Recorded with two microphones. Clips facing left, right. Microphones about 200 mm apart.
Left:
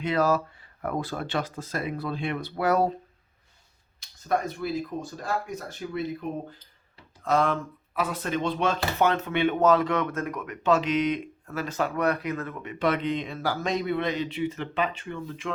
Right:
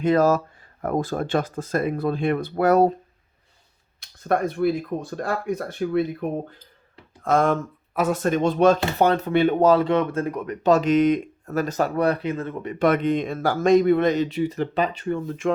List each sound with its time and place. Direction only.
0.0 s speech: 45° right (ahead or behind)
4.0 s speech: 60° right (ahead or behind)
7.3 s speech: 50° right (ahead or behind); by 12.7 s 30° right (ahead or behind)
12.8 s speech: 50° right (ahead or behind)